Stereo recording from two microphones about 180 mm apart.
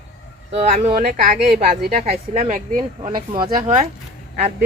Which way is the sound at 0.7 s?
50° right (ahead or behind).